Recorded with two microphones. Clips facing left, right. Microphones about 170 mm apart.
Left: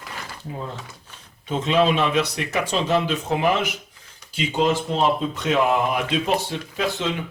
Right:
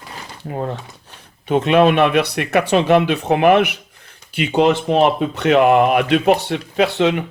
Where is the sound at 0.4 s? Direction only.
65° right (ahead or behind).